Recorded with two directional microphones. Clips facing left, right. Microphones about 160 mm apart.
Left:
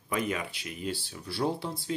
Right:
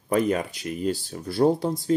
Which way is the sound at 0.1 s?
40° right (ahead or behind).